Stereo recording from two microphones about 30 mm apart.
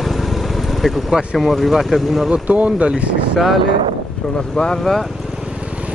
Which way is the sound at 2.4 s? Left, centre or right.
Right.